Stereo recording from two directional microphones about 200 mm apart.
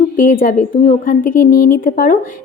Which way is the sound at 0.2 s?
45° left (ahead or behind).